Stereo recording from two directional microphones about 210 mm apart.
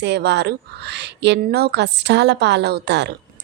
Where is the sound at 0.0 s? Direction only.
55° right (ahead or behind).